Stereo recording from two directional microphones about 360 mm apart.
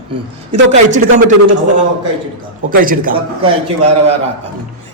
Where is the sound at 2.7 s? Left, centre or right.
Right.